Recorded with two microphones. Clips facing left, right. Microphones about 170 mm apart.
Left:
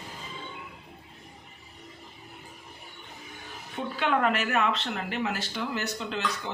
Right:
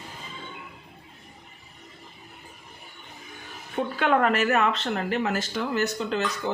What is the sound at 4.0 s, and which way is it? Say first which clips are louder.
Speech: right 3 dB; 45° right (ahead or behind).